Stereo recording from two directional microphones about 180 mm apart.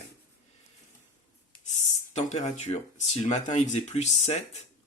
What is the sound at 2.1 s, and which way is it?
Speech, 40° left (ahead or behind).